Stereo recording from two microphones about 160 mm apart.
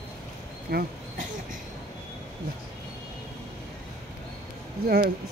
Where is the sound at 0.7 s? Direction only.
75° right (ahead or behind).